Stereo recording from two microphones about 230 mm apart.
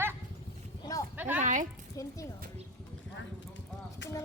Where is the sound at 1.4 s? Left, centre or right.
Right.